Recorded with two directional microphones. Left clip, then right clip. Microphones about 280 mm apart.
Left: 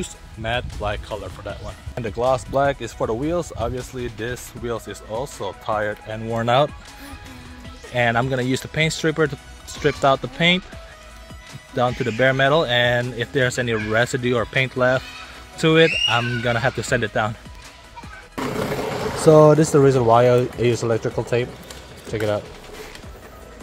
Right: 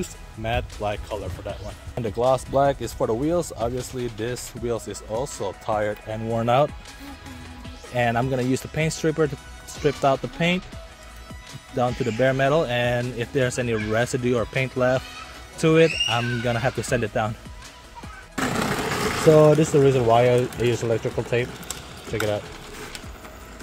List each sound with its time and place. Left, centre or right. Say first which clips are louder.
0.0 s speech: left 2 dB; centre
7.9 s speech: left 3 dB; centre
11.7 s speech: left 3 dB; centre
18.4 s a sound: even; right
19.3 s speech: left 4 dB; centre